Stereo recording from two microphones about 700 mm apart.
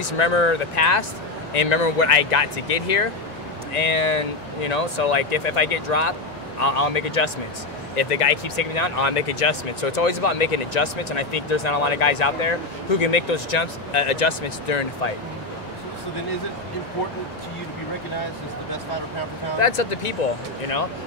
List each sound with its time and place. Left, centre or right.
0.0 s speech: left
19.6 s speech: left